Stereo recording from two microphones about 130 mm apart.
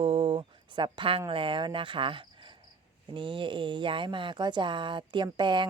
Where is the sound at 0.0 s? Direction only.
40° right (ahead or behind).